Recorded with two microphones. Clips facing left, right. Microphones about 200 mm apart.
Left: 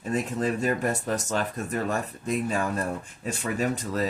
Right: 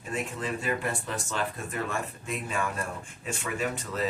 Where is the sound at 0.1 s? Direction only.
40° left (ahead or behind).